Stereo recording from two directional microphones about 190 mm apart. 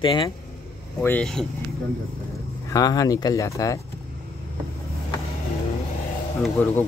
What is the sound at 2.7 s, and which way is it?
Speech, 20° left (ahead or behind).